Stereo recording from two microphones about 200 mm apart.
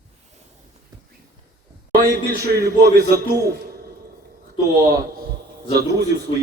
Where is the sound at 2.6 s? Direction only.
50° right (ahead or behind).